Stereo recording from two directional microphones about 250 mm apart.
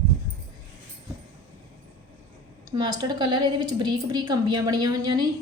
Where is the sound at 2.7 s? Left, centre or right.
Centre.